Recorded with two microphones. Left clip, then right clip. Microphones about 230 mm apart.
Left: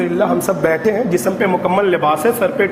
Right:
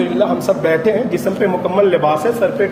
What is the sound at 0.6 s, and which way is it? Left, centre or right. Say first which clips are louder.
A man's voice: right 1 dB; left.